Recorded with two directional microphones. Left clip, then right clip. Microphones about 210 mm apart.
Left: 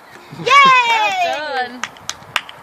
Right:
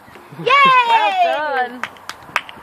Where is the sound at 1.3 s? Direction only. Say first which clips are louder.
Right 2 dB; 10° right (ahead or behind).